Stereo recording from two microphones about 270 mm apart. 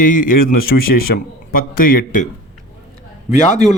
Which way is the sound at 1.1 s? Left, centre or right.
Left.